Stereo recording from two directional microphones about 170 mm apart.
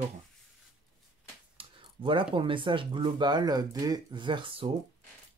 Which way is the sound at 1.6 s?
30° right (ahead or behind).